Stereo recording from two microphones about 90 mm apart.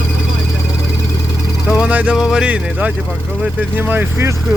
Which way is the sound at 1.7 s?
10° right (ahead or behind).